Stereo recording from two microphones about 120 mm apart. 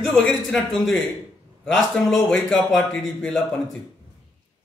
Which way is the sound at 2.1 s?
5° left (ahead or behind).